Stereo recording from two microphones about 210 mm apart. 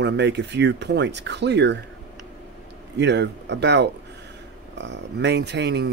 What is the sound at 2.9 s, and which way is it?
Speech, 55° right (ahead or behind).